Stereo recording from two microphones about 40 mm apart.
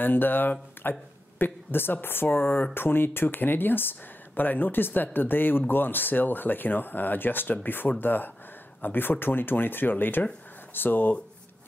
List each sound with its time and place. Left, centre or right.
0.0 s a woman's voice: left
2.2 s speech: left
2.7 s speech: left